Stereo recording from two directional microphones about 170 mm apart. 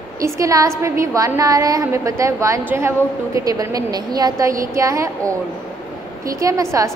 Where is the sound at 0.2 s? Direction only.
20° right (ahead or behind).